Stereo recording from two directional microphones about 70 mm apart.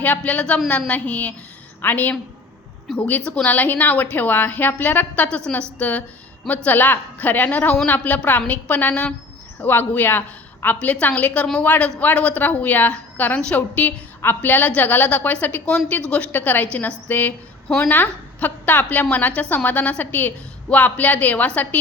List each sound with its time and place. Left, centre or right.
0.0 s a woman's voice: left
2.9 s a woman's voice: centre
6.7 s a woman's voice: left